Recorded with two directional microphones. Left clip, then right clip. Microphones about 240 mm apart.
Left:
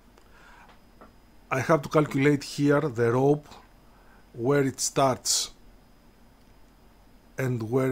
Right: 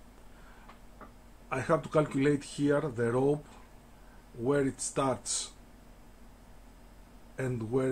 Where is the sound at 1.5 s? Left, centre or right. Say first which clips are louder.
Left 5 dB; left.